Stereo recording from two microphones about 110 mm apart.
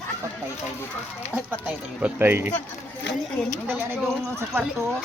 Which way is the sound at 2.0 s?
15° right (ahead or behind).